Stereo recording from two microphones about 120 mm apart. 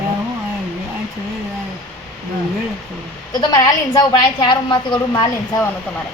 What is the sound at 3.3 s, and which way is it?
A woman's voice, 35° left (ahead or behind).